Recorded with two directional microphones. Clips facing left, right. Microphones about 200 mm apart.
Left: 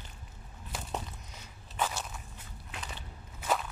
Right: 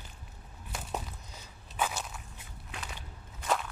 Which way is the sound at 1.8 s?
5° right (ahead or behind).